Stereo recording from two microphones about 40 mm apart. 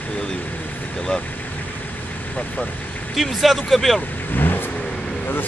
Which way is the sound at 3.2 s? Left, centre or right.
Centre.